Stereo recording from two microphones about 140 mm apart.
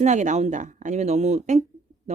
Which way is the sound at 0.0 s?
60° right (ahead or behind).